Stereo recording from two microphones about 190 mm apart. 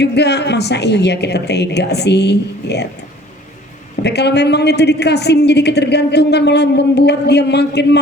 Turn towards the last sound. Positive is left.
turn(degrees=60)  # may be behind; listen again after turning